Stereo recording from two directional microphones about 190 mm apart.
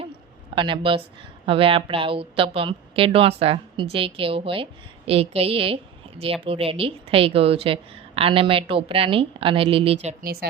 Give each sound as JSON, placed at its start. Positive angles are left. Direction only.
{"t": 0.5, "sound": "a woman's voice", "side_deg": -25}